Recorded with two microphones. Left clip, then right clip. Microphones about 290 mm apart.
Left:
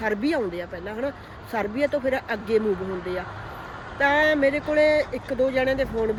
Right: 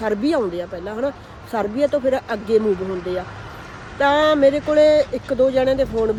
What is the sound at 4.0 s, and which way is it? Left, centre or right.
A woman's voice, centre.